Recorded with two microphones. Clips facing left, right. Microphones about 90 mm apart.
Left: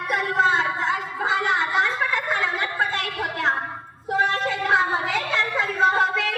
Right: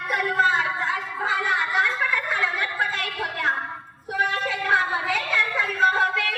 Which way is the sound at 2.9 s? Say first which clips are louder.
Left 2 dB; 20° left (ahead or behind).